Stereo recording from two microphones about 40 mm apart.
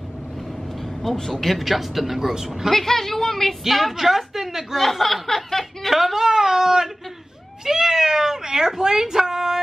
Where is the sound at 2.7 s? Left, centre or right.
Centre.